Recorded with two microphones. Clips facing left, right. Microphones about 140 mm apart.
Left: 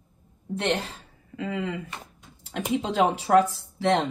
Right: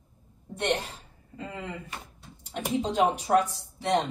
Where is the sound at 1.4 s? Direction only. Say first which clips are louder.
Left 7 dB; 90° left.